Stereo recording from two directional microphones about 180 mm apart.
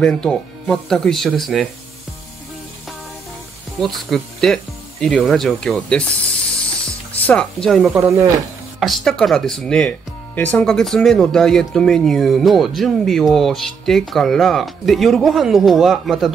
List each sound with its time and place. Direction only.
0.0 s speech: 5° left (ahead or behind)
3.8 s speech: centre (ahead or behind)
7.2 s speech: 5° left (ahead or behind)
8.0 s speech: 15° right (ahead or behind)
8.7 s speech: centre (ahead or behind)